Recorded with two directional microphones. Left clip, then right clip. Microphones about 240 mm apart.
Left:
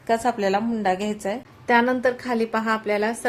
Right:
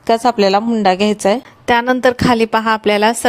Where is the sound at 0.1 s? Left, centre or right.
Right.